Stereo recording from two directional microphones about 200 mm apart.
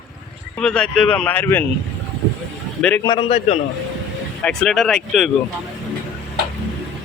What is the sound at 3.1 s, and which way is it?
Speech, 30° left (ahead or behind).